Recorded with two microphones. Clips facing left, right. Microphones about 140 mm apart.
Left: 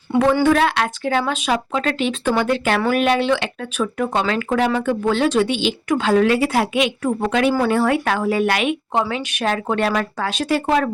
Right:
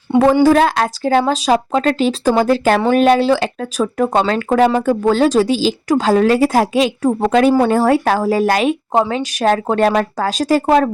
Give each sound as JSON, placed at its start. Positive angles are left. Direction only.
{"t": 0.4, "sound": "speech", "side_deg": -40}